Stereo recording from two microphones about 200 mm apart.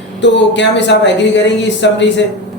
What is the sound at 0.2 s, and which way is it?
Speech, 65° left (ahead or behind).